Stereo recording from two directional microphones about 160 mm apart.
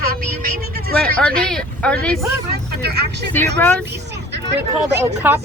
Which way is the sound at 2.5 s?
90° right.